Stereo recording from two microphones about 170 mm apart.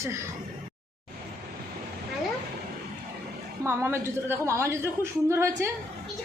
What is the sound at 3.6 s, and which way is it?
A woman's voice, 15° right (ahead or behind).